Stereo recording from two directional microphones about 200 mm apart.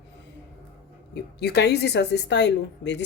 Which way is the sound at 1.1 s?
55° left (ahead or behind).